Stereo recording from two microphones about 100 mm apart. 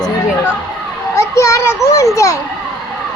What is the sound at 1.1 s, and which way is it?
Speech, 30° left (ahead or behind).